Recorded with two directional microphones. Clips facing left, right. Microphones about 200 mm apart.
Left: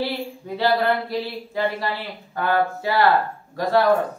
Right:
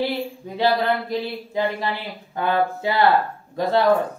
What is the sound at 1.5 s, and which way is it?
Speech, 20° right (ahead or behind).